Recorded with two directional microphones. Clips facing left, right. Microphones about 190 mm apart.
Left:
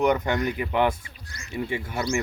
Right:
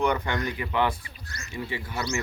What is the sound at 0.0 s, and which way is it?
Speech, 45° left (ahead or behind).